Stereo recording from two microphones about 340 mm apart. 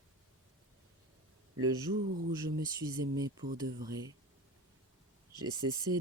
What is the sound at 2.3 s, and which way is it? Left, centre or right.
Speech, centre.